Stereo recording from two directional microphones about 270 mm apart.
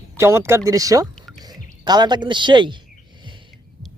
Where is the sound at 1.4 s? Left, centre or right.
Centre.